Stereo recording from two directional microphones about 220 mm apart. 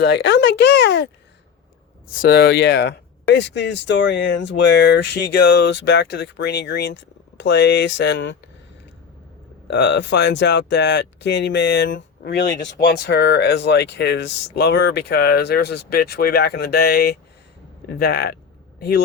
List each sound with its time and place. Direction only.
0.0 s speech: 50° left (ahead or behind)
2.2 s speech: 45° left (ahead or behind)
9.6 s speech: 50° left (ahead or behind)